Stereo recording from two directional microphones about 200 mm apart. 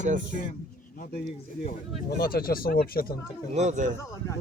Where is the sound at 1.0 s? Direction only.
50° left (ahead or behind).